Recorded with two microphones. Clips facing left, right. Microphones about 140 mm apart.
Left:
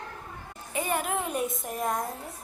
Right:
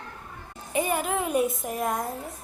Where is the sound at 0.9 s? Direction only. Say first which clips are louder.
Right 4 dB; 5° right (ahead or behind).